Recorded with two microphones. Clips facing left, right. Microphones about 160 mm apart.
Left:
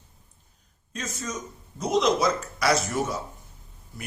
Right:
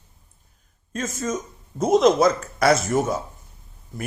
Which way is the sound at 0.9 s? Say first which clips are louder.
Right 7 dB; 50° right (ahead or behind).